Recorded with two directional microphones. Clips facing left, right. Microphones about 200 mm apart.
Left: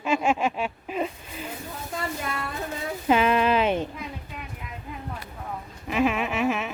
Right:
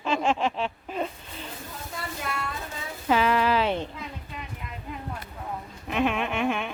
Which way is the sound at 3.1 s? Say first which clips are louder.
Left 2 dB; 20° left (ahead or behind).